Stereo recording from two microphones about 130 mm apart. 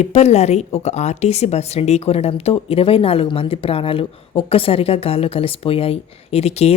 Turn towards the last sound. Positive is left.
turn(degrees=55)  # may be behind; listen again after turning